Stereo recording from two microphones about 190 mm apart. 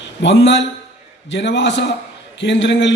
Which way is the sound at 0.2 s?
65° left (ahead or behind).